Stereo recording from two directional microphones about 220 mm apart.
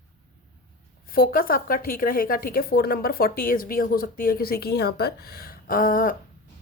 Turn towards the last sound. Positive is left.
turn(degrees=40)  # may be behind; listen again after turning